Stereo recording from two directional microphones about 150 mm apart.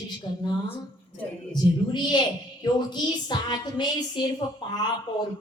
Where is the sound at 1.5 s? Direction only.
30° left (ahead or behind).